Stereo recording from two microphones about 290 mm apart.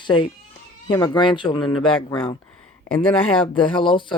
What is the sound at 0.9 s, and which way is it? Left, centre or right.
Speech, centre.